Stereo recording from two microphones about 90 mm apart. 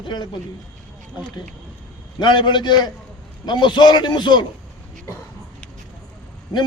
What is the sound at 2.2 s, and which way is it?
A man's voice, 55° left (ahead or behind).